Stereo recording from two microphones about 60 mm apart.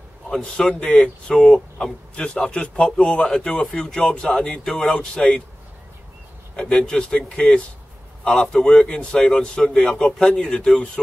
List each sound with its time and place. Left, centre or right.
0.3 s speech: centre
6.5 s speech: centre